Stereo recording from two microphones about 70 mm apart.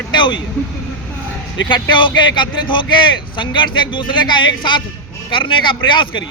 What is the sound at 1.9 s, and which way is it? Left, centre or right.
Speech, left.